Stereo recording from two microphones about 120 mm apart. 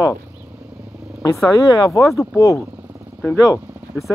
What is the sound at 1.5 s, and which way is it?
Speech, 35° left (ahead or behind).